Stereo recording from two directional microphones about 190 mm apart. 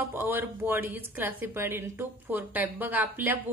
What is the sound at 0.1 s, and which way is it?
A woman's voice, 10° right (ahead or behind).